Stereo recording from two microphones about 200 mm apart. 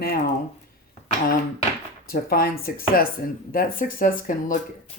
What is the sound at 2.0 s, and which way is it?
Speech, 45° left (ahead or behind).